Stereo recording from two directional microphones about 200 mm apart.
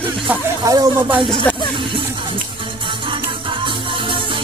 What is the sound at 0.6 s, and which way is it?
Speech, 15° right (ahead or behind).